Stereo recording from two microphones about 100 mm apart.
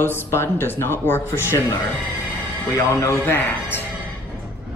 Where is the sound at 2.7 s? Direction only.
30° left (ahead or behind).